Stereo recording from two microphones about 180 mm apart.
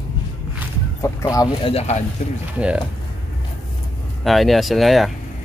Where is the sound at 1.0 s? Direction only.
20° left (ahead or behind).